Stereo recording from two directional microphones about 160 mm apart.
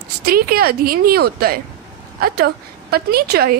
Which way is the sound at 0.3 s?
70° right (ahead or behind).